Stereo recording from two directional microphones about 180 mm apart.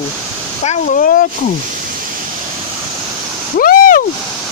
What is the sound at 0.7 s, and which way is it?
Speech, 50° left (ahead or behind).